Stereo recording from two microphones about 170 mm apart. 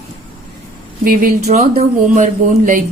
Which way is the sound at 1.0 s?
60° right (ahead or behind).